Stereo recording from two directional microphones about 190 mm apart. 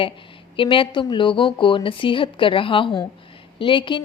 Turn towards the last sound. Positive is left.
turn(degrees=25)  # may be behind; listen again after turning